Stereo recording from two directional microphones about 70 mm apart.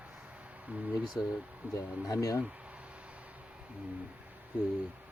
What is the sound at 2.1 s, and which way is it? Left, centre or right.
Speech, left.